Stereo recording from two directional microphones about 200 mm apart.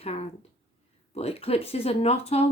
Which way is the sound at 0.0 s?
30° left (ahead or behind).